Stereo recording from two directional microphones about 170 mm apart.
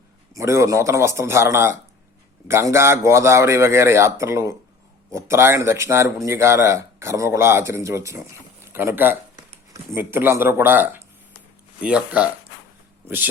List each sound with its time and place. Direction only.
0.3 s speech: 15° right (ahead or behind)